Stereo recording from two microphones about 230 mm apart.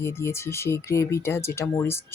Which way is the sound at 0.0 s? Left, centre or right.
Centre.